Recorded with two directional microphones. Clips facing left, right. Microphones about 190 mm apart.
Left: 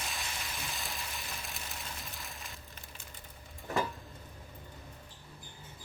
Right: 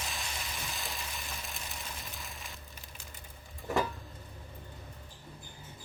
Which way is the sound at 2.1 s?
Centre (ahead or behind).